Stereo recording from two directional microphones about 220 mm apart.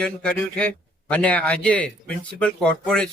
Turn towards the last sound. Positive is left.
turn(degrees=5)  # may be behind; listen again after turning